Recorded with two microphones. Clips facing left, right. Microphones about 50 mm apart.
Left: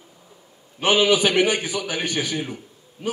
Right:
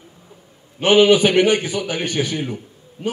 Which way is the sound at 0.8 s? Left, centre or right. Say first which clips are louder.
Right 5 dB; right.